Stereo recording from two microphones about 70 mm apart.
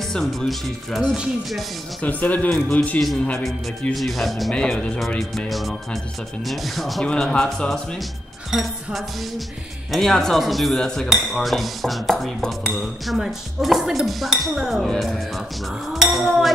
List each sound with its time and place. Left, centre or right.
0.1 s speech: centre
0.5 s cutlery: centre
2.0 s speech: left
3.9 s cutlery: centre
4.6 s speech: centre
5.5 s cutlery: centre
7.1 s speech: centre
8.5 s music: centre
9.8 s cutlery: centre